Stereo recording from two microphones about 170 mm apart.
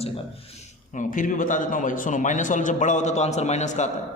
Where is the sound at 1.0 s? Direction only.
50° left (ahead or behind).